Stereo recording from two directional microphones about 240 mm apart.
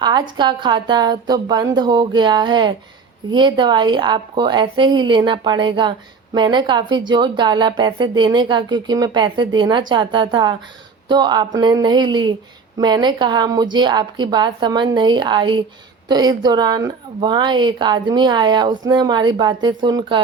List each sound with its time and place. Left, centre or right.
0.0 s speech: centre